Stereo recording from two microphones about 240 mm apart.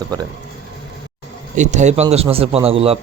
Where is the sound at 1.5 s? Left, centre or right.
Right.